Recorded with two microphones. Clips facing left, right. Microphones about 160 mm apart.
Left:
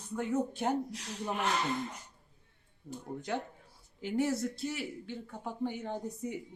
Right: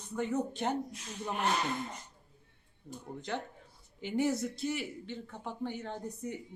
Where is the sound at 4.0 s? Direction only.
Centre (ahead or behind).